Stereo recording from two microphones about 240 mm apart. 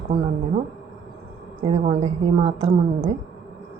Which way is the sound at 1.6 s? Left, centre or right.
Right.